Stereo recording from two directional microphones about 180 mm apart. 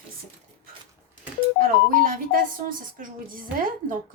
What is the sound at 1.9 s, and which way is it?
A woman's voice, 50° right (ahead or behind).